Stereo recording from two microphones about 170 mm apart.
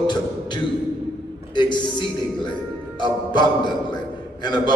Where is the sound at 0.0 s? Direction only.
25° left (ahead or behind).